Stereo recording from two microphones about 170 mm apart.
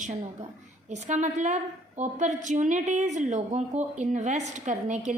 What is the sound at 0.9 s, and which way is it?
A woman's voice, 45° right (ahead or behind).